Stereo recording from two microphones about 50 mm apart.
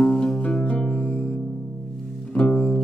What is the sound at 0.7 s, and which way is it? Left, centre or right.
Music, left.